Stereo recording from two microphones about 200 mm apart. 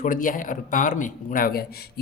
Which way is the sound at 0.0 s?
40° left (ahead or behind).